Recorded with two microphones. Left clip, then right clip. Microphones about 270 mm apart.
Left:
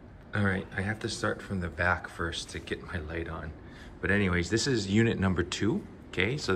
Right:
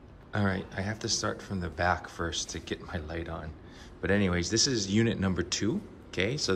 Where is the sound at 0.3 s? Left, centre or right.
Centre.